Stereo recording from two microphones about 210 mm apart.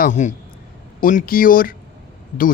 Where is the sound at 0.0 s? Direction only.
35° left (ahead or behind).